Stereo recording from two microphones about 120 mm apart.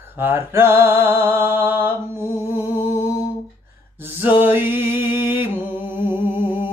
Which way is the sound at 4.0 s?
15° right (ahead or behind).